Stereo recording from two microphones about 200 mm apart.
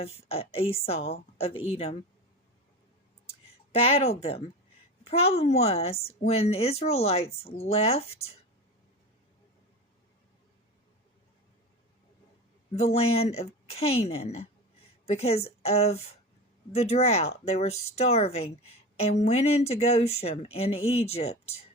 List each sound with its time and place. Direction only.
0.0 s a woman's voice: 30° left (ahead or behind)
3.7 s a woman's voice: 30° left (ahead or behind)
12.7 s speech: 30° left (ahead or behind)